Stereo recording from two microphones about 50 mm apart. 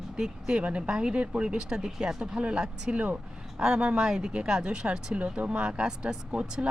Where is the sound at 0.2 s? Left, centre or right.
Centre.